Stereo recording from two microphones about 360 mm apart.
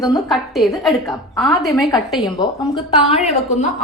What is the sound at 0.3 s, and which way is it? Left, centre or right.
A woman's voice, centre.